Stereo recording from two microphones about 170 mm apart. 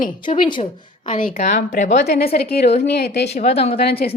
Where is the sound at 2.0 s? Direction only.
75° left (ahead or behind).